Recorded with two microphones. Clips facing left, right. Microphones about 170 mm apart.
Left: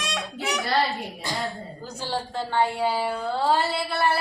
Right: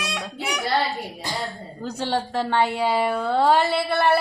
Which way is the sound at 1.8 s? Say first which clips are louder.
Right 6 dB; 65° right (ahead or behind).